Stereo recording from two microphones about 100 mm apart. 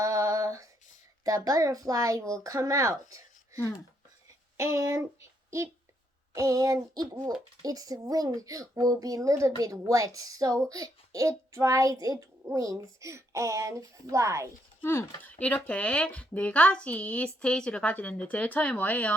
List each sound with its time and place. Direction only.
0.0 s a sound: 35° right (ahead or behind)
1.2 s a child's voice: 40° right (ahead or behind)
14.8 s speech: 20° left (ahead or behind)